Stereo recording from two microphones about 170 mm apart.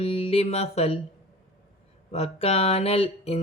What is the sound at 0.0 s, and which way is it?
Music, 35° left (ahead or behind).